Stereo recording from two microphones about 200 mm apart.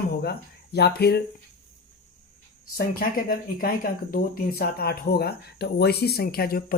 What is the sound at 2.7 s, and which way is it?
Speech, 50° left (ahead or behind).